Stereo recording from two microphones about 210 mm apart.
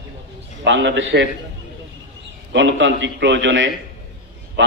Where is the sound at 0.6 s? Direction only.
55° right (ahead or behind).